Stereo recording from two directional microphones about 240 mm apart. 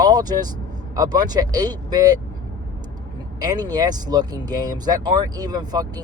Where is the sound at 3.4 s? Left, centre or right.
Centre.